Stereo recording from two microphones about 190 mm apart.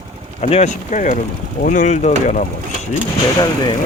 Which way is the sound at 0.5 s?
40° left (ahead or behind).